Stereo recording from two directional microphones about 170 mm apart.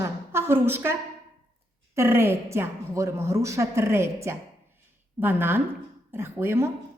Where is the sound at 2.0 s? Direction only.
15° right (ahead or behind).